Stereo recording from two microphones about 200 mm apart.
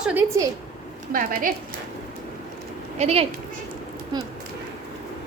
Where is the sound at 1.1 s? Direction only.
45° right (ahead or behind).